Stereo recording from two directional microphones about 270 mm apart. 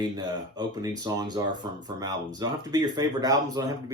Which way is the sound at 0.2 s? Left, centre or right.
Centre.